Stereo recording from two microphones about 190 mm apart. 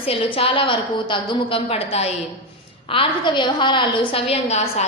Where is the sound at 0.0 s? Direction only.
30° left (ahead or behind).